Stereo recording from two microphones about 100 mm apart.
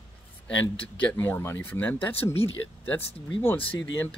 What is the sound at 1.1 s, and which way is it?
Speech, 20° left (ahead or behind).